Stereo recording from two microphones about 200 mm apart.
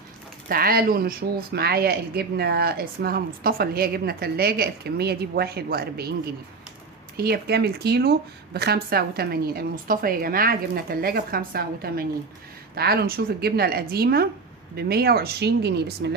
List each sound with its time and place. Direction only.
0.4 s speech: 45° right (ahead or behind)
7.2 s speech: 50° right (ahead or behind)